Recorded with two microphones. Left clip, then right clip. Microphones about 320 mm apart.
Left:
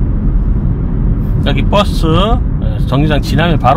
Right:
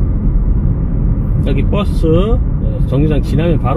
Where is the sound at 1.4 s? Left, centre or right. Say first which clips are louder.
Left 7 dB; left.